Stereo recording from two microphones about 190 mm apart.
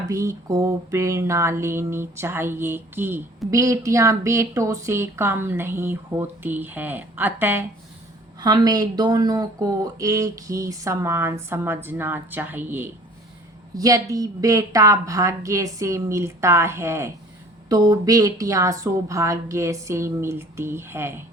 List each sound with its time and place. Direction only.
0.1 s speech: 15° right (ahead or behind)
8.4 s speech: 20° right (ahead or behind)